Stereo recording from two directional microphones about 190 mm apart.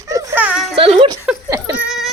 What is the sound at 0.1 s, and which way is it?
Music, 15° right (ahead or behind).